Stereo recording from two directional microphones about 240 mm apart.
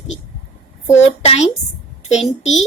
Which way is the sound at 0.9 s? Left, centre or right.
Left.